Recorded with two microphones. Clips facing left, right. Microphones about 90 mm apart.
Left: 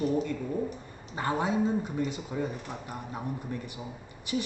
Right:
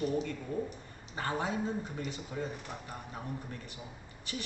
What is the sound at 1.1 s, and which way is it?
Speech, 20° left (ahead or behind).